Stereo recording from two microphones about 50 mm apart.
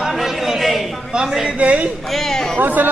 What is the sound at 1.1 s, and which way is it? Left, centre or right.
Speech, centre.